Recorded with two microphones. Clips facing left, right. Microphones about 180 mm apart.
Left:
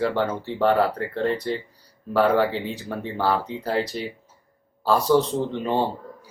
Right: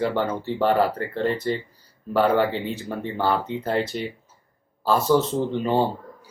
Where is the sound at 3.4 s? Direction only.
25° right (ahead or behind).